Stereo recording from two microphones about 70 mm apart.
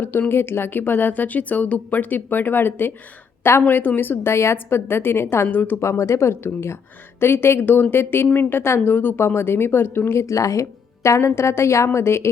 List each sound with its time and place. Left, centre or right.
0.0 s a woman's voice: left
5.8 s a woman's voice: left